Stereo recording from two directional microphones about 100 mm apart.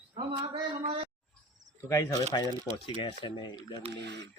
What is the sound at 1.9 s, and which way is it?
Speech, 30° left (ahead or behind).